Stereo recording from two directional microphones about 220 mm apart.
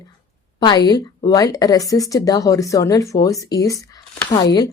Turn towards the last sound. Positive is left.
turn(degrees=20)  # may be behind; listen again after turning